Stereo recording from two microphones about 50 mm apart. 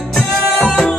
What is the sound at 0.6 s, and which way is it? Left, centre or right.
Music, centre.